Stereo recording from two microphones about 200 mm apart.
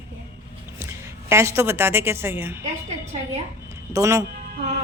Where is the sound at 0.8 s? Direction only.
15° right (ahead or behind).